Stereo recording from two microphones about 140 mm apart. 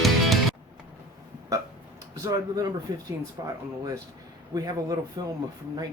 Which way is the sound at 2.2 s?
25° right (ahead or behind).